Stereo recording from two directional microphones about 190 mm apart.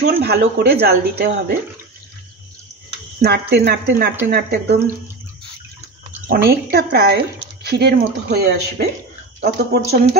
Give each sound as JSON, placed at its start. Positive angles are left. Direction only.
{"t": 0.0, "sound": "speech", "side_deg": -60}
{"t": 3.2, "sound": "speech", "side_deg": -55}
{"t": 6.2, "sound": "a woman's voice", "side_deg": -50}